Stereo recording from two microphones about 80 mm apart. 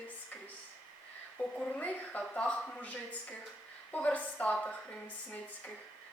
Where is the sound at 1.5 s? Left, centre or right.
Centre.